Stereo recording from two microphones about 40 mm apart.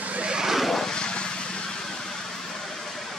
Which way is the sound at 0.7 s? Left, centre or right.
Centre.